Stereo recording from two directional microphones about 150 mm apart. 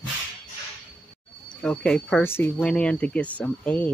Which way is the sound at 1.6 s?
5° left (ahead or behind).